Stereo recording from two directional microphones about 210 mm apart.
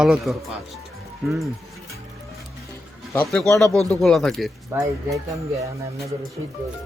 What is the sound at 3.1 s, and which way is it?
Speech, 5° left (ahead or behind).